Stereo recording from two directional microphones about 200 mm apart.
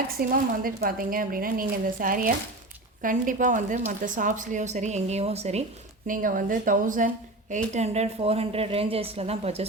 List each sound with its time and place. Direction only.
0.2 s a woman's voice: 45° right (ahead or behind)
6.1 s a woman's voice: 45° right (ahead or behind)